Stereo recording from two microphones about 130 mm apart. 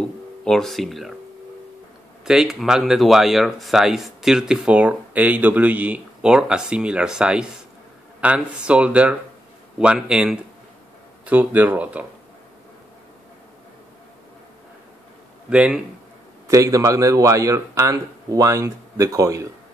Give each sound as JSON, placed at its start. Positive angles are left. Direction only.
{"t": 0.0, "sound": "a sound", "side_deg": 5}
{"t": 2.2, "sound": "speech", "side_deg": -5}
{"t": 15.5, "sound": "speech", "side_deg": -10}
{"t": 16.4, "sound": "speech", "side_deg": -25}